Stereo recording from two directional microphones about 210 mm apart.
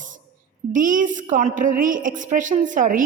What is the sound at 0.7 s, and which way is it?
A woman's voice, 40° right (ahead or behind).